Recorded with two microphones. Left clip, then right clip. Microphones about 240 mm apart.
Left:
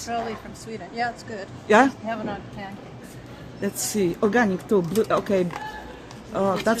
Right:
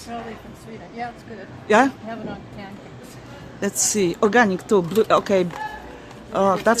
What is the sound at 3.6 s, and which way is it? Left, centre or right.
Speech, right.